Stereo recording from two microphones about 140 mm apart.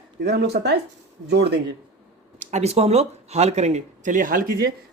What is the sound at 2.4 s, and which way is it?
Speech, 55° right (ahead or behind).